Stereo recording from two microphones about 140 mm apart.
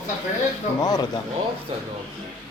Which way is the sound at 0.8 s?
30° left (ahead or behind).